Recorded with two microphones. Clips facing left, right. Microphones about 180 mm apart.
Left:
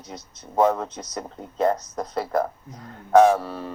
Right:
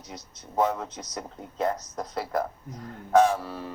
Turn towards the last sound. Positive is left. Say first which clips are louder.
# left 6 dB
turn(degrees=60)  # may be behind; listen again after turning